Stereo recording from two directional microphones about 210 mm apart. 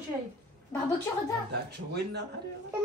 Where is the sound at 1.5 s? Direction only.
50° right (ahead or behind).